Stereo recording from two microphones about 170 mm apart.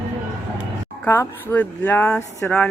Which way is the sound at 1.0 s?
15° left (ahead or behind).